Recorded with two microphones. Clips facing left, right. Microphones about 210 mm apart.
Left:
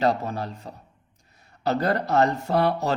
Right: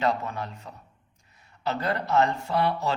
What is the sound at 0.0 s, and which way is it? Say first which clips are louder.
Speech: left 3 dB; 35° left (ahead or behind).